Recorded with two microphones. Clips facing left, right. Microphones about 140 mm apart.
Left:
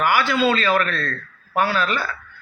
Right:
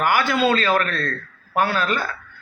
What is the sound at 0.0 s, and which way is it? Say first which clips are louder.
A man's voice: even; 50° right (ahead or behind).